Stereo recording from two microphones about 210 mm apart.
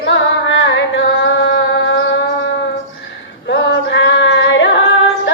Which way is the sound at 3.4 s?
55° left (ahead or behind).